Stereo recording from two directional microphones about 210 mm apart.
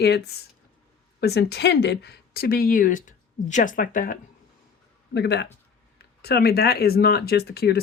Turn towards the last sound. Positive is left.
turn(degrees=50)  # may be behind; listen again after turning